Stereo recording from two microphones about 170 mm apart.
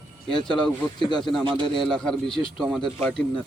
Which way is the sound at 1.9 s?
5° left (ahead or behind).